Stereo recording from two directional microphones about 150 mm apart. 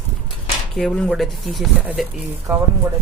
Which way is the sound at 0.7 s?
5° left (ahead or behind).